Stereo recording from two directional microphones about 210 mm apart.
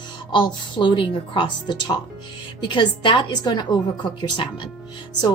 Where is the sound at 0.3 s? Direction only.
20° left (ahead or behind).